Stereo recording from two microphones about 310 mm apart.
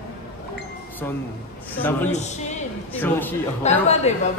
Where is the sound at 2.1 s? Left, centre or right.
Left.